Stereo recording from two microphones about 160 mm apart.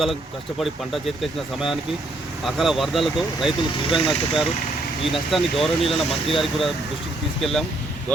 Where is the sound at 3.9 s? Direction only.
30° left (ahead or behind).